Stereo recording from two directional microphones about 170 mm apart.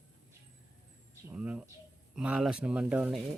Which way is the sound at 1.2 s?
5° right (ahead or behind).